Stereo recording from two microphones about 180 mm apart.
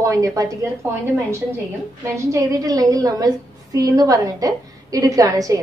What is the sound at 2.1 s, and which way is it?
A woman's voice, 20° right (ahead or behind).